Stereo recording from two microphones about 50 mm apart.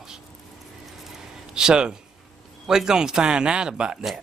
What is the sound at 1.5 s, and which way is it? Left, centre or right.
Speech, centre.